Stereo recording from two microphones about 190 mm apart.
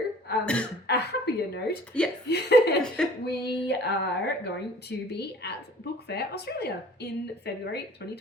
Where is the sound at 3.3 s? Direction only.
60° left (ahead or behind).